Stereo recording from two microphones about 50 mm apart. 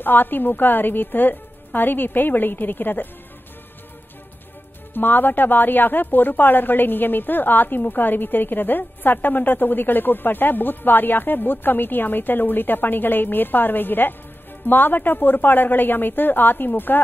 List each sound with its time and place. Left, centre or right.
0.0 s speech: left
4.9 s speech: left